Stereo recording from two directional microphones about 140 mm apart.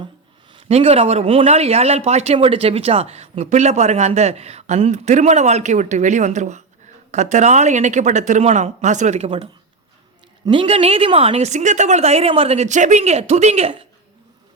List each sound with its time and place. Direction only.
0.5 s a woman's voice: 45° right (ahead or behind)